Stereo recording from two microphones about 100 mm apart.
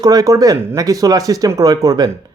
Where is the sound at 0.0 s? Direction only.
40° right (ahead or behind).